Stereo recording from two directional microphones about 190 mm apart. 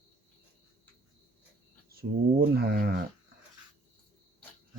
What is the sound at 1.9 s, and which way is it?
Speech, 55° right (ahead or behind).